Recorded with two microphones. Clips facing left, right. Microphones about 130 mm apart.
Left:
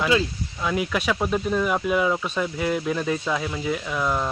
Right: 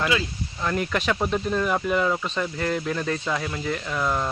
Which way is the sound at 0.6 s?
5° left (ahead or behind).